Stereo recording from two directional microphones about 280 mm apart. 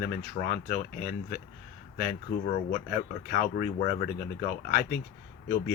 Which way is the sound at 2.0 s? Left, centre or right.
Left.